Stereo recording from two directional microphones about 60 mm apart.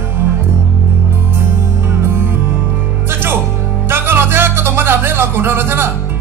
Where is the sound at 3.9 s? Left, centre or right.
Right.